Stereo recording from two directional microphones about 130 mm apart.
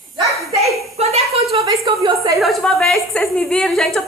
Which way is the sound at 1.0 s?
55° right (ahead or behind).